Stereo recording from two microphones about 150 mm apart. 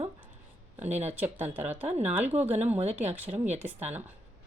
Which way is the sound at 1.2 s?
10° right (ahead or behind).